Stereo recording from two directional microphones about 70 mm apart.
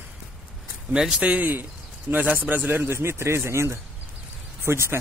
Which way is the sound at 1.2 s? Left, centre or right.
Right.